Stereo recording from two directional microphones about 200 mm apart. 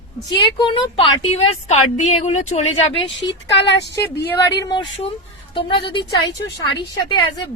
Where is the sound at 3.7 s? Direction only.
55° left (ahead or behind).